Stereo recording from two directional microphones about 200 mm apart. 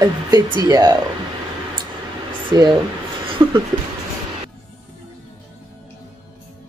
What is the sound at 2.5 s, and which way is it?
Speech, 20° right (ahead or behind).